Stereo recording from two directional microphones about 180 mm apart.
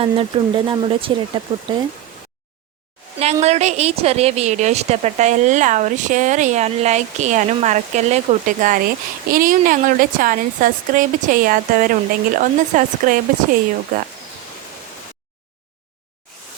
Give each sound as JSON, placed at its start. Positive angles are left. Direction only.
{"t": 0.0, "sound": "speech", "side_deg": -30}
{"t": 3.4, "sound": "a woman's voice", "side_deg": -40}